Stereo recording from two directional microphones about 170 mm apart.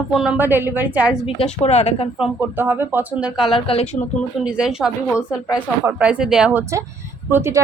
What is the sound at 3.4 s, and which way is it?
Speech, 30° left (ahead or behind).